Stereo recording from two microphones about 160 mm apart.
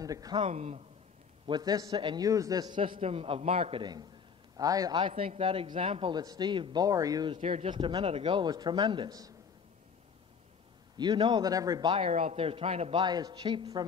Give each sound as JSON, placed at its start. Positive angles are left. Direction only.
{"t": 0.0, "sound": "speech", "side_deg": -20}
{"t": 0.4, "sound": "a man's voice", "side_deg": -40}
{"t": 1.5, "sound": "a man's voice", "side_deg": -25}
{"t": 4.6, "sound": "a man's voice", "side_deg": -25}
{"t": 7.3, "sound": "a man's voice", "side_deg": -45}
{"t": 7.7, "sound": "a man's voice", "side_deg": -30}
{"t": 11.0, "sound": "a man's voice", "side_deg": -30}